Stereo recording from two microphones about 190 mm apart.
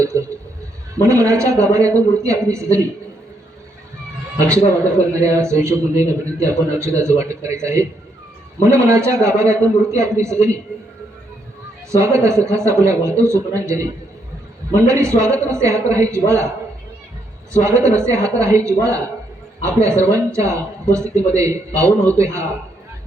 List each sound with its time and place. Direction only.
0.0 s a sound: 15° right (ahead or behind)
1.0 s a man's voice: 15° right (ahead or behind)
4.4 s a man's voice: 15° right (ahead or behind)
11.9 s a man's voice: 15° right (ahead or behind)
17.6 s a man's voice: 15° right (ahead or behind)